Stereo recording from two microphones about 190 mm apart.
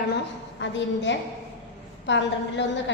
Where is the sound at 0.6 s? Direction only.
70° left (ahead or behind).